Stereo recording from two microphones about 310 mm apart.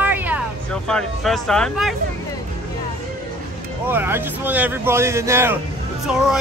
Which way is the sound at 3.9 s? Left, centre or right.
Centre.